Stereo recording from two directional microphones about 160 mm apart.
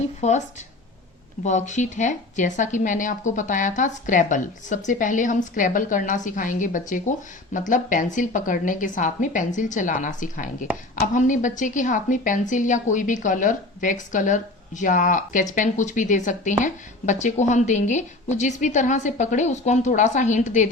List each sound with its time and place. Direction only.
0.2 s a woman's voice: 45° left (ahead or behind)
1.5 s a woman's voice: 50° left (ahead or behind)